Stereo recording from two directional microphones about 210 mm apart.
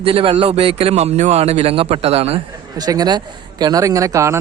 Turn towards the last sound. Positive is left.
turn(degrees=-15)  # may be behind; listen again after turning